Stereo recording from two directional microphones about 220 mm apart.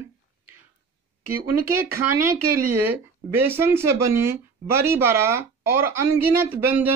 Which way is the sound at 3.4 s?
10° right (ahead or behind).